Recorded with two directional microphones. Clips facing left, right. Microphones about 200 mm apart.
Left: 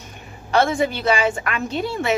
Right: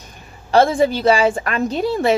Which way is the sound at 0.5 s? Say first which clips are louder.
Right 5 dB; 35° right (ahead or behind).